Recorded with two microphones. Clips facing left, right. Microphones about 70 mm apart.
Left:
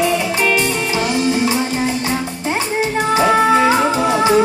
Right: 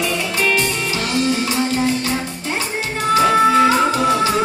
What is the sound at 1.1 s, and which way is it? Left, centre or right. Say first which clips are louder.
Music: left 1 dB; left.